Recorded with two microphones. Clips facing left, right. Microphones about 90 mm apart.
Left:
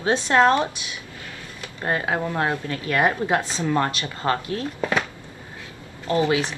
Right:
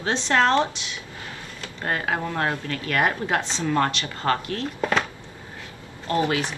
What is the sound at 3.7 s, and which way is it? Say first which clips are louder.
Speech: even; 20° left (ahead or behind).